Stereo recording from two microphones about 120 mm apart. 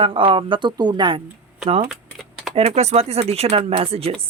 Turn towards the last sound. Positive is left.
turn(degrees=-55)  # may be behind; listen again after turning